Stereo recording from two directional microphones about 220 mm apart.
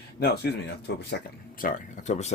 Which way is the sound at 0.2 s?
45° left (ahead or behind).